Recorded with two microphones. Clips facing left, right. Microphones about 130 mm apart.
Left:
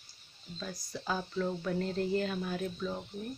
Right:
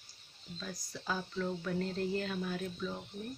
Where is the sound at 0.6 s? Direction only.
20° left (ahead or behind).